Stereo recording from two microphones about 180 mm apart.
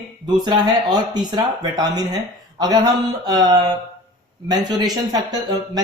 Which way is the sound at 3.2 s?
20° right (ahead or behind).